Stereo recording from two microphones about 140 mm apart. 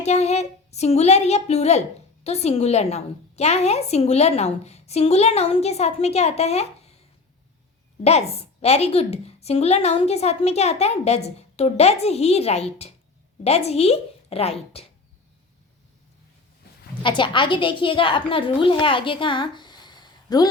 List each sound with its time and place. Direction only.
0.0 s a woman's voice: 50° left (ahead or behind)
8.0 s a woman's voice: 45° left (ahead or behind)
17.0 s a woman's voice: 35° left (ahead or behind)